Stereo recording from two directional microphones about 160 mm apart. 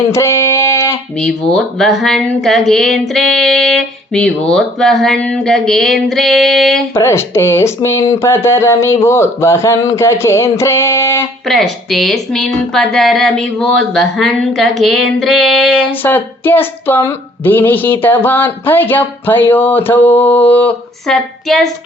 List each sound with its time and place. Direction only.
0.1 s a sound: 15° left (ahead or behind)
1.2 s speech: centre (ahead or behind)
6.9 s speech: 15° left (ahead or behind)
11.4 s speech: centre (ahead or behind)
15.9 s speech: 10° left (ahead or behind)